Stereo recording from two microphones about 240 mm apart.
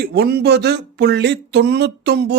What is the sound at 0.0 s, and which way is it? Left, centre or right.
Speech, right.